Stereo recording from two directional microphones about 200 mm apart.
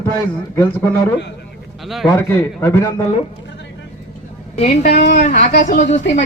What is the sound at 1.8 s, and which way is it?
A man's voice, centre (ahead or behind).